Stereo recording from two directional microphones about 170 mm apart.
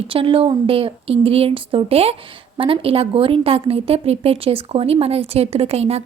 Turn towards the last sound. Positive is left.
turn(degrees=-40)  # may be behind; listen again after turning